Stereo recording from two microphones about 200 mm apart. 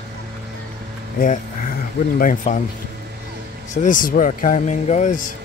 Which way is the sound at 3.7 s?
40° left (ahead or behind).